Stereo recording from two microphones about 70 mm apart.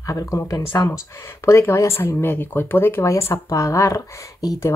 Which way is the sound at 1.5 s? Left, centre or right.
Left.